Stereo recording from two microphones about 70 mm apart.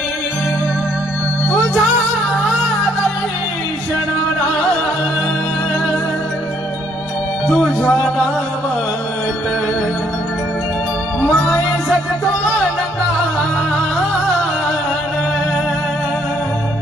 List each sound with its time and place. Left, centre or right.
7.4 s music: centre
7.8 s music: centre